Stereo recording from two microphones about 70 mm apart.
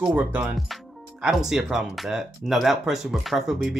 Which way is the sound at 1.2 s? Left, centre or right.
Centre.